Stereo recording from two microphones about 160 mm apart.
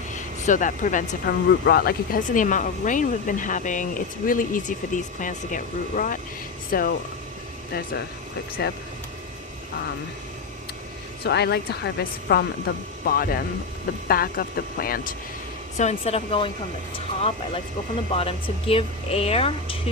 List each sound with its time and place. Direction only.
0.1 s speech: 50° left (ahead or behind)
1.3 s speech: 70° left (ahead or behind)
8.6 s speech: 90° left
11.2 s speech: 90° left; by 15.1 s 65° left (ahead or behind)
15.8 s speech: 45° left (ahead or behind)